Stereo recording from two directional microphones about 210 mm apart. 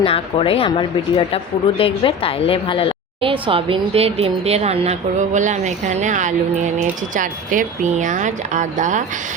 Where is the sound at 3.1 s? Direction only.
25° right (ahead or behind).